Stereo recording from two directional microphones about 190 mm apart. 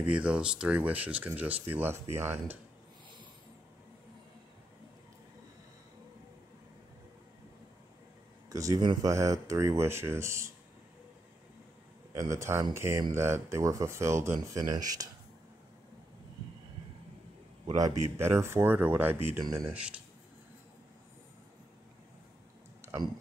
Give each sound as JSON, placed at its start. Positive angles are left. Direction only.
{"t": 0.0, "sound": "speech", "side_deg": -5}
{"t": 8.5, "sound": "speech", "side_deg": -20}
{"t": 12.1, "sound": "speech", "side_deg": -15}
{"t": 17.6, "sound": "speech", "side_deg": -20}